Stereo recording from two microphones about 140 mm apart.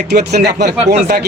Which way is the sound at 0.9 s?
90° right.